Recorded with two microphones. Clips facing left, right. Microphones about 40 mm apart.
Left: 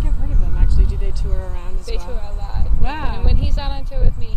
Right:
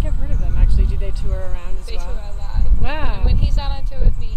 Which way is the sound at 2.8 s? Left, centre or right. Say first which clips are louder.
Even; centre.